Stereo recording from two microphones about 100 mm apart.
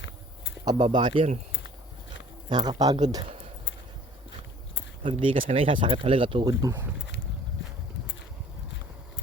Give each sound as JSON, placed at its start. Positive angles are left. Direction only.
{"t": 0.6, "sound": "speech", "side_deg": -40}
{"t": 2.5, "sound": "speech", "side_deg": -45}
{"t": 5.0, "sound": "speech", "side_deg": -70}
{"t": 6.4, "sound": "speech", "side_deg": -40}